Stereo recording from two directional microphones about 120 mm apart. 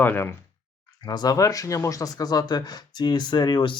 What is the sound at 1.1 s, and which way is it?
Speech, 35° left (ahead or behind).